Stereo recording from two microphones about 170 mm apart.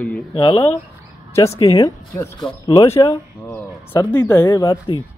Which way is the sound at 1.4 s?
20° left (ahead or behind).